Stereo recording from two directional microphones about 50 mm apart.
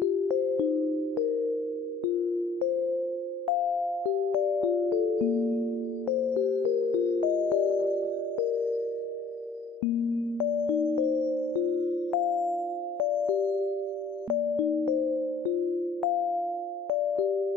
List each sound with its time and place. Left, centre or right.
7.3 s music: left
12.1 s music: centre